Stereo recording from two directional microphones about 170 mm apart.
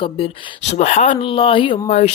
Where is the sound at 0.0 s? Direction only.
30° left (ahead or behind).